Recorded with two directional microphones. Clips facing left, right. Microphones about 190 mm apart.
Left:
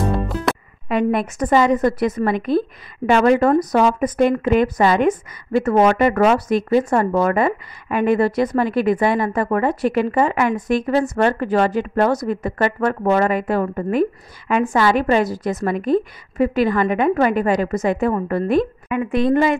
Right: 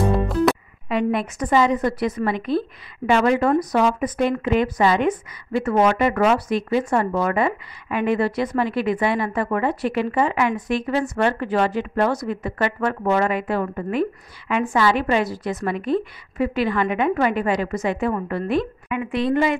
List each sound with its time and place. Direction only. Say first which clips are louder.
0.0 s music: right 2 dB; centre (ahead or behind)
0.8 s speech: left 3 dB; 50° left (ahead or behind)